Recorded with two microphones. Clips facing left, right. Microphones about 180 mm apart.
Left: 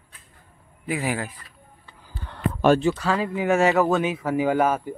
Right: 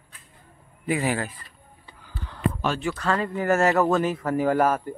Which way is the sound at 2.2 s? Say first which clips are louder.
Left 7 dB; 55° left (ahead or behind).